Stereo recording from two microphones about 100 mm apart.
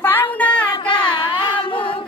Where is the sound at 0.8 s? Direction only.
55° left (ahead or behind).